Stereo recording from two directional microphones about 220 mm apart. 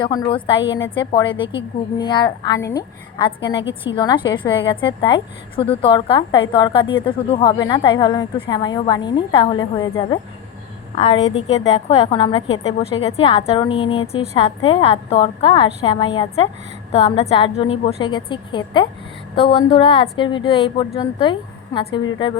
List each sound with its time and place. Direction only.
0.0 s a woman's voice: 20° left (ahead or behind)